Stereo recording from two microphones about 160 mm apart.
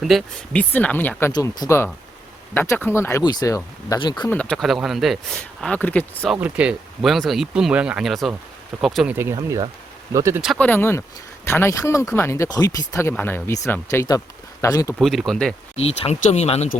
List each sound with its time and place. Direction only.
0.0 s speech: centre (ahead or behind)
1.3 s speech: 25° left (ahead or behind)
4.3 s speech: 5° left (ahead or behind)
6.3 s speech: 5° right (ahead or behind)
9.1 s speech: 15° right (ahead or behind)
10.4 s speech: centre (ahead or behind)
10.7 s speech: 15° left (ahead or behind)
14.9 s speech: centre (ahead or behind)
15.7 s speech: 40° left (ahead or behind)